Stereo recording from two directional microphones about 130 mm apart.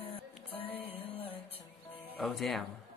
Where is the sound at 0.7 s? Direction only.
45° left (ahead or behind).